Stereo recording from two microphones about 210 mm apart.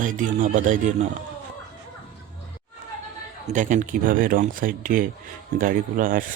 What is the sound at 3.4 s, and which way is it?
Speech, 35° right (ahead or behind).